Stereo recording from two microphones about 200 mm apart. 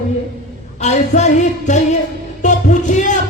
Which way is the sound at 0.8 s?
35° left (ahead or behind).